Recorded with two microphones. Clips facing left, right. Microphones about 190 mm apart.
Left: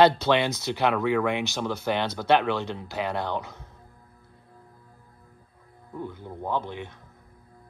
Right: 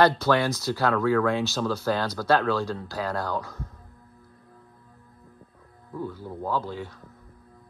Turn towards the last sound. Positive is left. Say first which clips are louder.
# right 1 dB
turn(degrees=20)  # may be behind; listen again after turning